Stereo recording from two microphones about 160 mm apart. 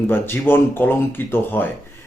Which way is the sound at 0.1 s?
15° left (ahead or behind).